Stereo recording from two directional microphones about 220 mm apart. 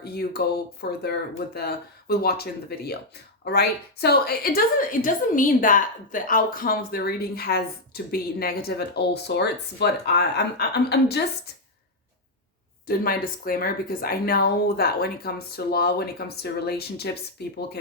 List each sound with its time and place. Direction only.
0.0 s a woman's voice: 45° left (ahead or behind)
12.9 s speech: 40° left (ahead or behind)